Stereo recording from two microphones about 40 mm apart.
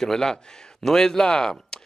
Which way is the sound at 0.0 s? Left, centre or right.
Centre.